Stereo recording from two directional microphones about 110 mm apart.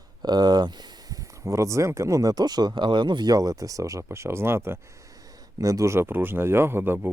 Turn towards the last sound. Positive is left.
turn(degrees=-20)  # may be behind; listen again after turning